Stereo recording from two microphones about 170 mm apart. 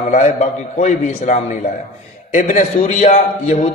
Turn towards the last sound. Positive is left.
turn(degrees=40)  # may be behind; listen again after turning